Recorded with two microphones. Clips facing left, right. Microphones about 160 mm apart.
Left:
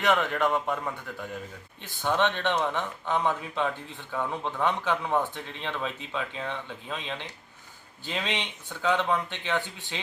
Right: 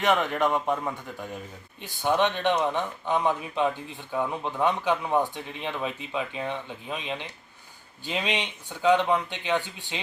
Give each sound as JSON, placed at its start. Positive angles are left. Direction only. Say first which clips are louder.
{"t": 0.0, "sound": "speech", "louder": "right 1 dB", "side_deg": -15}